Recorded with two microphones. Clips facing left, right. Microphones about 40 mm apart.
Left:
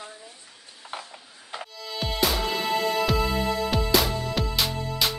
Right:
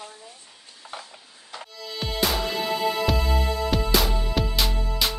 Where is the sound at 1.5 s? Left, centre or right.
Left.